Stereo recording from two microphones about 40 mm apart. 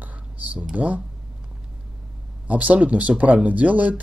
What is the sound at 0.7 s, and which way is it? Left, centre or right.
Speech, right.